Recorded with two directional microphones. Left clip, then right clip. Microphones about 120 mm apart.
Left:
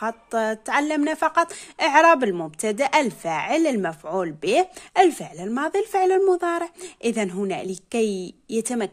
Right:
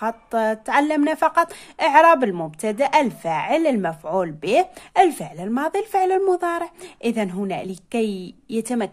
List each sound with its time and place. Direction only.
0.0 s a woman's voice: 20° left (ahead or behind)